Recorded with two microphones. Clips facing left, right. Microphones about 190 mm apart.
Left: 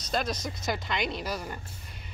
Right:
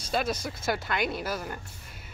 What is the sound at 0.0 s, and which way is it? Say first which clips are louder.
A woman's voice: right 1 dB; 5° right (ahead or behind).